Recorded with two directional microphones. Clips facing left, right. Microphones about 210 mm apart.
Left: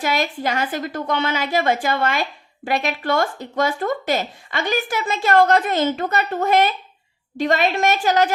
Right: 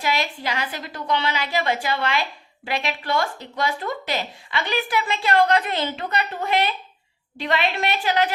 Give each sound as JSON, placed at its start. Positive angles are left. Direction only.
{"t": 0.0, "sound": "speech", "side_deg": 50}